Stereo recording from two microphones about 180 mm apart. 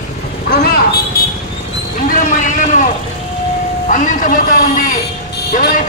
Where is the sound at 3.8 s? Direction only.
45° left (ahead or behind).